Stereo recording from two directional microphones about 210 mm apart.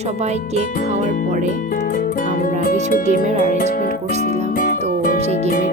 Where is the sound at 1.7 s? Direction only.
40° left (ahead or behind).